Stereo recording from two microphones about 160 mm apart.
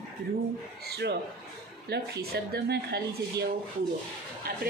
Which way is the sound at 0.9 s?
90° right.